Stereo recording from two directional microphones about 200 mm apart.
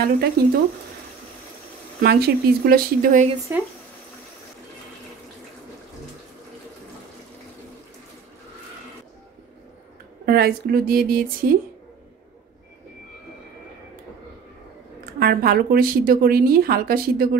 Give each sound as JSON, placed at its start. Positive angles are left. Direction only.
{"t": 0.4, "sound": "speech", "side_deg": -50}
{"t": 2.0, "sound": "speech", "side_deg": -50}
{"t": 3.5, "sound": "speech", "side_deg": -15}
{"t": 10.2, "sound": "speech", "side_deg": -50}
{"t": 15.1, "sound": "speech", "side_deg": -50}